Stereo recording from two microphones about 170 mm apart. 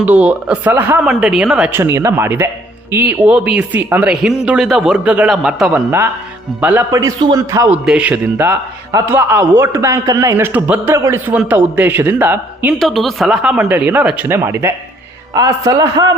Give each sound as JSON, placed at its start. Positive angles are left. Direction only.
{"t": 0.0, "sound": "a man's voice", "side_deg": -10}
{"t": 12.8, "sound": "a man's voice", "side_deg": 0}